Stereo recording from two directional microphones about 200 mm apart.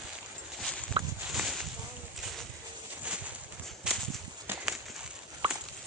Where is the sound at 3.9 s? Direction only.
5° right (ahead or behind).